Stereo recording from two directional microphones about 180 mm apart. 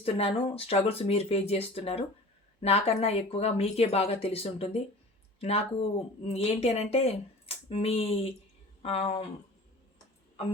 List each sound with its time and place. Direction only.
0.0 s speech: 35° left (ahead or behind)